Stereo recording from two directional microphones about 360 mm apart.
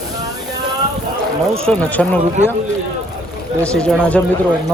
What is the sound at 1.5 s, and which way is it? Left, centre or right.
Speech, centre.